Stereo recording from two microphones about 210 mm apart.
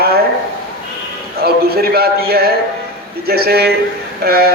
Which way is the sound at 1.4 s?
50° right (ahead or behind).